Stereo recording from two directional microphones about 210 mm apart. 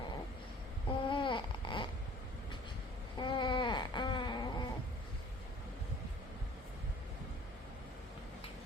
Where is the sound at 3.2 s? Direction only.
20° left (ahead or behind).